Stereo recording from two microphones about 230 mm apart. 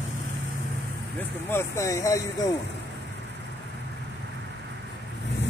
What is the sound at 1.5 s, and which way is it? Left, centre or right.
Speech, centre.